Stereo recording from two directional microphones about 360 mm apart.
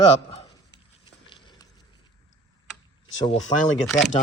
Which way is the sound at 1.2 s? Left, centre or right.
Centre.